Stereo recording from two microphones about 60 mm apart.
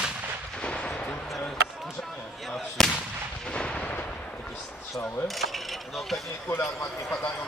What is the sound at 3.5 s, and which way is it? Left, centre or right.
Artillery fire, centre.